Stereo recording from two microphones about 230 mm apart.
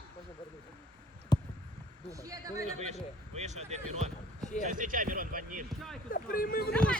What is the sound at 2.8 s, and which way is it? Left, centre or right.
Speech, right.